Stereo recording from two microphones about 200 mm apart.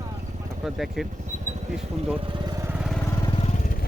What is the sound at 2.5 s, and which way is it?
Lawn mower, 15° right (ahead or behind).